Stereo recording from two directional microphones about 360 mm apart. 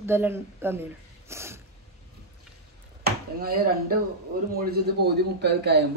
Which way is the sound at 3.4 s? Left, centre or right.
Right.